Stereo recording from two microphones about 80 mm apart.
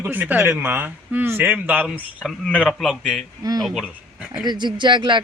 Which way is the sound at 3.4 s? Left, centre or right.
Right.